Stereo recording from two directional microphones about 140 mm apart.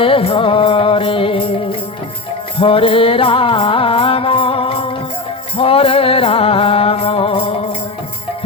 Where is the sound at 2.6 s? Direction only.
40° left (ahead or behind).